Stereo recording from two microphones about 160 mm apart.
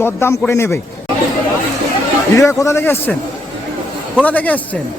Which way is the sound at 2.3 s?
20° left (ahead or behind).